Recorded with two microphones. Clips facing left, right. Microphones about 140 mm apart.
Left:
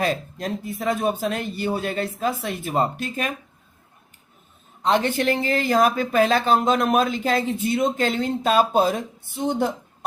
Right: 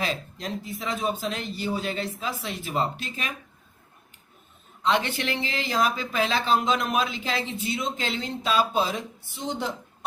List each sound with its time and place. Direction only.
0.0 s speech: 50° left (ahead or behind)
4.8 s speech: 45° left (ahead or behind)